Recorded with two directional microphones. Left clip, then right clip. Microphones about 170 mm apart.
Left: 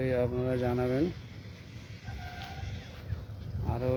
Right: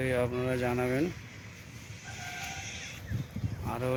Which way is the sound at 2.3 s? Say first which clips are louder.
Right 6 dB; 30° left (ahead or behind).